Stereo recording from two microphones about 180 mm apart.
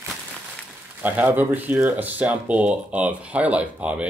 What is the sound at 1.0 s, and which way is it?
Speech, 10° right (ahead or behind).